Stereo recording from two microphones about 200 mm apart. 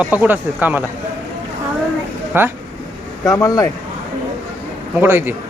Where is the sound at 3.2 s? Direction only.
15° left (ahead or behind).